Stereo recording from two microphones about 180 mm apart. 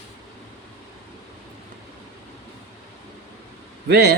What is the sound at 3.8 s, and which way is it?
Speech, 60° right (ahead or behind).